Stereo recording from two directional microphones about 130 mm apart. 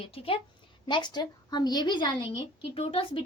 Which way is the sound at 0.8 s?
35° left (ahead or behind).